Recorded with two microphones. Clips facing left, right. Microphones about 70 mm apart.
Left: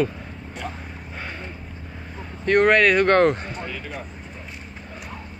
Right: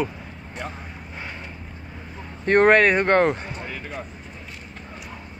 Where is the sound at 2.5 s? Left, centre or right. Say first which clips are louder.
Right 1 dB; right.